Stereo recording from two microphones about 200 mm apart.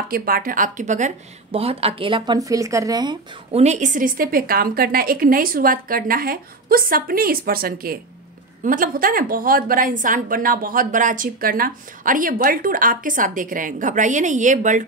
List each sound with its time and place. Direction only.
0.1 s a woman's voice: 45° right (ahead or behind); by 3.2 s 20° right (ahead or behind)
3.5 s a woman's voice: 35° right (ahead or behind)